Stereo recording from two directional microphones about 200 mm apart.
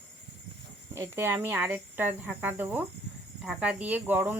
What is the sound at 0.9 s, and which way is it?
Speech, 10° right (ahead or behind).